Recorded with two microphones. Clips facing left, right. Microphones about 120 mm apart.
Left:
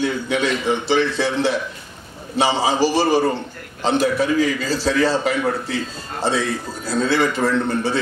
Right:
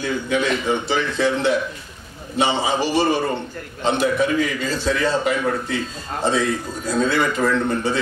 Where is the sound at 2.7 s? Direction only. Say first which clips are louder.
Left 2 dB; 35° left (ahead or behind).